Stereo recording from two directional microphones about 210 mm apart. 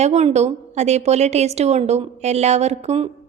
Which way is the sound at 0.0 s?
30° right (ahead or behind).